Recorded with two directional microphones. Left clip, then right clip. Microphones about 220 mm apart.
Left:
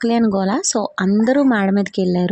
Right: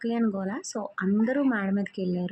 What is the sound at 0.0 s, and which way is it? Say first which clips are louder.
Speech: left 12 dB; 40° left (ahead or behind).